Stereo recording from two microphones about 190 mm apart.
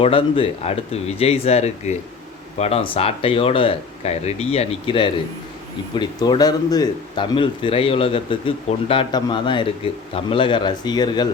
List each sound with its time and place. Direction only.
0.0 s speech: 30° left (ahead or behind)